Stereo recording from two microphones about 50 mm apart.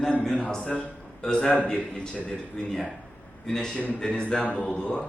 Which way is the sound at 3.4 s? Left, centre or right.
Centre.